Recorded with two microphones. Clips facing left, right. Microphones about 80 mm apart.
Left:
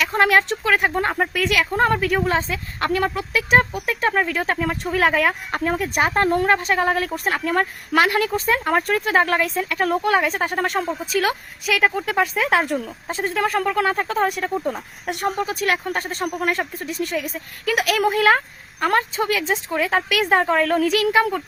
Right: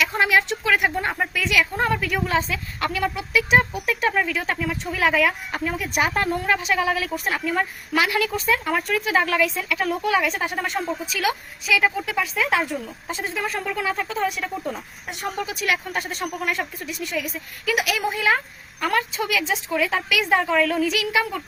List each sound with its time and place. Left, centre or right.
0.2 s speech: left
1.4 s a woman's voice: left
2.9 s a woman's voice: left
3.8 s speech: left
6.3 s a woman's voice: left
11.7 s a woman's voice: left
15.0 s speech: left
15.4 s a woman's voice: left
18.8 s a woman's voice: left